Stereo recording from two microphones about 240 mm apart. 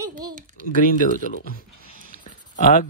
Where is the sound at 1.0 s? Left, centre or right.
Left.